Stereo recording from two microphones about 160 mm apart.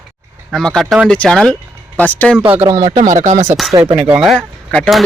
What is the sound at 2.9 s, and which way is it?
Speech, 50° right (ahead or behind).